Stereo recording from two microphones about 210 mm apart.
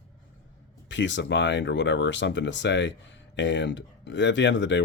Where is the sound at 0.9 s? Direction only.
60° left (ahead or behind).